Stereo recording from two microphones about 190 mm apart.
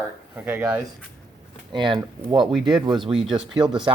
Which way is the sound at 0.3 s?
10° right (ahead or behind).